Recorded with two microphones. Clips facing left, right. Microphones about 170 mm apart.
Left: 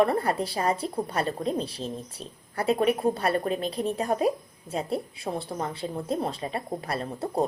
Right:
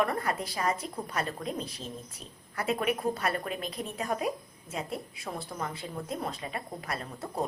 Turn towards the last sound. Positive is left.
turn(degrees=30)  # may be behind; listen again after turning